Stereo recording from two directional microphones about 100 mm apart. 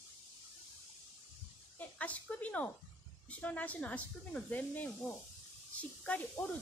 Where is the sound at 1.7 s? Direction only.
15° left (ahead or behind).